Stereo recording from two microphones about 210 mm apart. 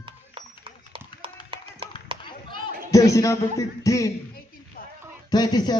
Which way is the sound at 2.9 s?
15° left (ahead or behind).